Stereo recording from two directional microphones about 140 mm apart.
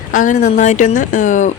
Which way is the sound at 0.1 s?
65° left (ahead or behind).